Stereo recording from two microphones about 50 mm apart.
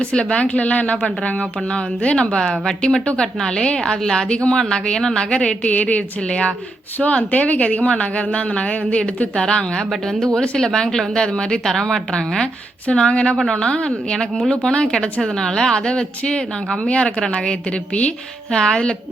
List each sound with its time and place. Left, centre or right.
0.0 s a woman's voice: left